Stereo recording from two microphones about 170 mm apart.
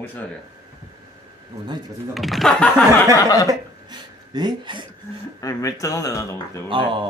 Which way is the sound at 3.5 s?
25° right (ahead or behind).